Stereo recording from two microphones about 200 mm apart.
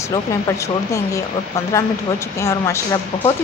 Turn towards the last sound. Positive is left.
turn(degrees=15)  # may be behind; listen again after turning